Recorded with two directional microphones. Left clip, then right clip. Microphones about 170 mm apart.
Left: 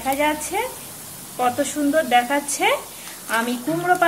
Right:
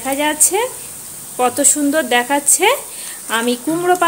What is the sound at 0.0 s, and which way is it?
A woman's voice, 65° right (ahead or behind).